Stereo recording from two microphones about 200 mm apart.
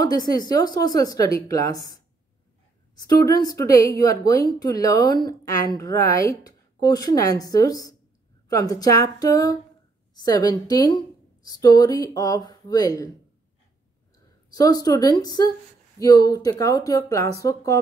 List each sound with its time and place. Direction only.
0.0 s a woman's voice: 20° left (ahead or behind)
3.0 s a woman's voice: 20° left (ahead or behind)
14.5 s a woman's voice: 20° left (ahead or behind)